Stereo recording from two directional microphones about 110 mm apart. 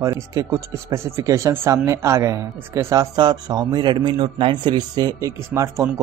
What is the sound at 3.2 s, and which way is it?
A man's voice, 40° right (ahead or behind).